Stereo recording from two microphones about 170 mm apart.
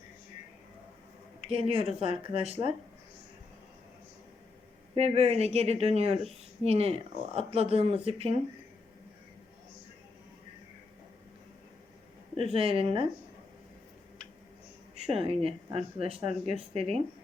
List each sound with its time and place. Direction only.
1.5 s speech: 35° right (ahead or behind)
4.9 s speech: 40° right (ahead or behind)
12.5 s speech: 35° right (ahead or behind)
14.9 s speech: 35° right (ahead or behind)